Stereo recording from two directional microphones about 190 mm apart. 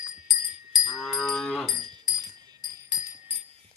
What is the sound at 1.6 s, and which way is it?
Music, 20° right (ahead or behind).